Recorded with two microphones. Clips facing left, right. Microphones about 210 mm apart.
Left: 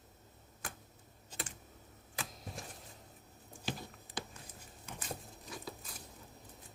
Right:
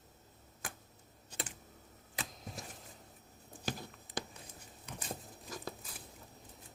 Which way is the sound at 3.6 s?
40° right (ahead or behind).